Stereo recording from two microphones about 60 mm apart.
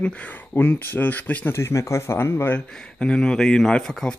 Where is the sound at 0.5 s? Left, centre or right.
Left.